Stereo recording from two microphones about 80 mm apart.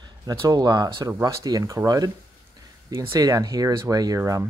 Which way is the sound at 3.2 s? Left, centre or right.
Right.